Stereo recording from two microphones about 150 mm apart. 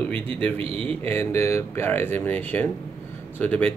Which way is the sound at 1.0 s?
15° left (ahead or behind).